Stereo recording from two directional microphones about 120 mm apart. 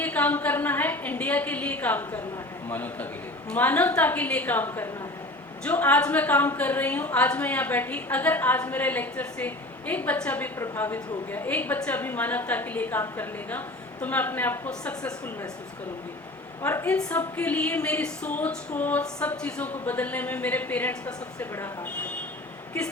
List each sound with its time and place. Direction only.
0.0 s a woman's voice: 15° left (ahead or behind)
16.6 s a woman's voice: 15° left (ahead or behind)